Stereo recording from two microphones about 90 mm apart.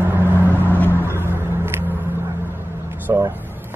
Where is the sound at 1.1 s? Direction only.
25° right (ahead or behind).